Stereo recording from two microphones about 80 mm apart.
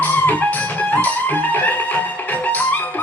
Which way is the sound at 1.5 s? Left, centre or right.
Left.